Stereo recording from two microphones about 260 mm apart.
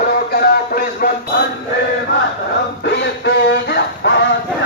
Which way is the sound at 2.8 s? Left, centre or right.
Left.